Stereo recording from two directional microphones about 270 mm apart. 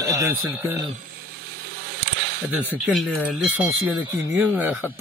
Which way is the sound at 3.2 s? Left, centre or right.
Centre.